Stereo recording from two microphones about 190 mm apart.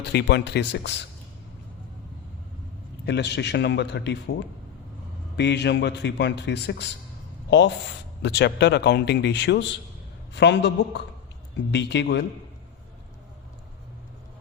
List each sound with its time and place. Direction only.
0.0 s a man's voice: 60° left (ahead or behind)
3.1 s a man's voice: 65° left (ahead or behind)
5.4 s a man's voice: 65° left (ahead or behind)
8.2 s a man's voice: 65° left (ahead or behind)